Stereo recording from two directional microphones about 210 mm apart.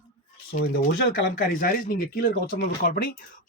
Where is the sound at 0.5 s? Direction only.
45° left (ahead or behind).